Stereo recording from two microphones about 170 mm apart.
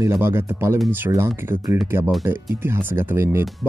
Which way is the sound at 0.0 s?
15° right (ahead or behind).